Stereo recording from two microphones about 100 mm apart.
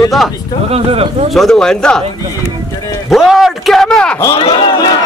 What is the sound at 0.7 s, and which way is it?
Speech, 80° right.